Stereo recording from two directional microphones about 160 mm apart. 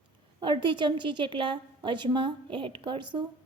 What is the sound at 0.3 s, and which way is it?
A woman's voice, 30° right (ahead or behind).